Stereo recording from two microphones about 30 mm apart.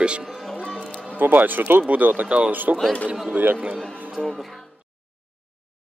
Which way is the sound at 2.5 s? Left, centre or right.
Right.